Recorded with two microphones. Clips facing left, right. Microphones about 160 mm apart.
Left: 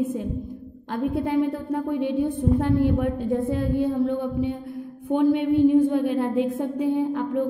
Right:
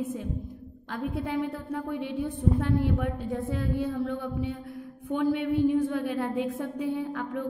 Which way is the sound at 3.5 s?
25° left (ahead or behind).